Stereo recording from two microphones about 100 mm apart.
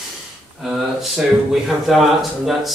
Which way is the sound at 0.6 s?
5° right (ahead or behind).